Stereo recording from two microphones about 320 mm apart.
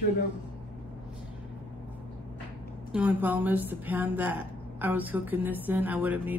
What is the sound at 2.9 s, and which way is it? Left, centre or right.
Speech, centre.